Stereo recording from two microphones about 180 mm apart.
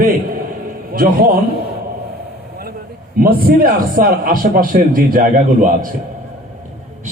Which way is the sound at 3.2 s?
55° right (ahead or behind).